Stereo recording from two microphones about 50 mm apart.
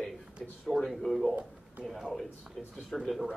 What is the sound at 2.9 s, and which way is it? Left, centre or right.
Speech, centre.